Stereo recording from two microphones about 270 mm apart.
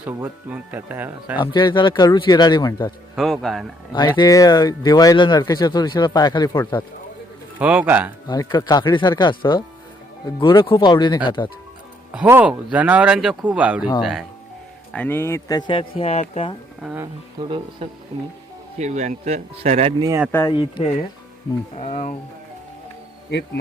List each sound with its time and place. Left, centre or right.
0.0 s speech: centre
1.4 s speech: centre
3.2 s speech: centre
4.2 s speech: centre
7.6 s speech: centre
8.3 s speech: centre
12.1 s speech: centre; by 16.6 s left
16.8 s speech: centre; by 20.1 s right
20.1 s speech: centre
20.3 s speech: centre